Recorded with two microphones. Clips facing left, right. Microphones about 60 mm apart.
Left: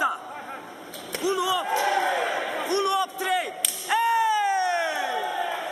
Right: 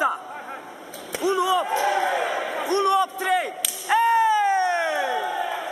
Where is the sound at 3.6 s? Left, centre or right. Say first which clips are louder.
Right 4 dB; centre.